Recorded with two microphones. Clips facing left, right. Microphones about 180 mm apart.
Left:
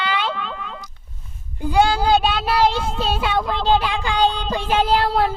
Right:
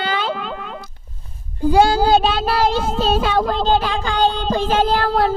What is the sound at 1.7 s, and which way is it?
Speech, 40° right (ahead or behind).